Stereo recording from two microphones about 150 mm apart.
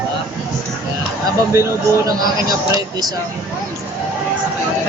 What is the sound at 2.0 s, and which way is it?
A man's voice, 25° right (ahead or behind).